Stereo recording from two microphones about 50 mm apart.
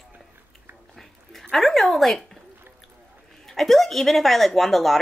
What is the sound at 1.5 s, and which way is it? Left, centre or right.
Speech, centre.